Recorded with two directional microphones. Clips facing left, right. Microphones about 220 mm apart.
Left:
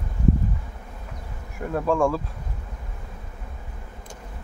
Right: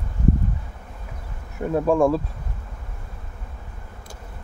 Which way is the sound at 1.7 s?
20° right (ahead or behind).